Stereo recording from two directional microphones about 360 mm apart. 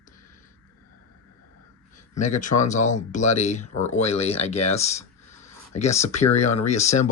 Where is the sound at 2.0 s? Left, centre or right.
Centre.